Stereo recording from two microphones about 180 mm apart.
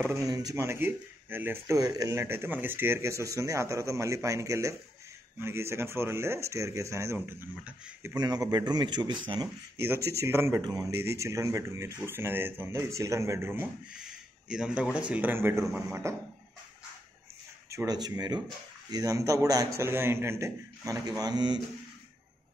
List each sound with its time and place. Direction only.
0.3 s speech: 20° right (ahead or behind)
8.2 s speech: 20° right (ahead or behind)
10.1 s speech: 15° right (ahead or behind)
17.6 s speech: 20° right (ahead or behind)